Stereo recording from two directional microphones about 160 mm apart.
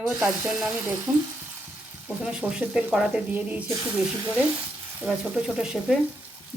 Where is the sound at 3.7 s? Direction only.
20° right (ahead or behind).